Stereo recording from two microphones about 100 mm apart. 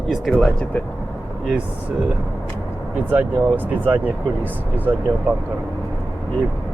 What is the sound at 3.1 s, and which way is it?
Speech, 20° right (ahead or behind).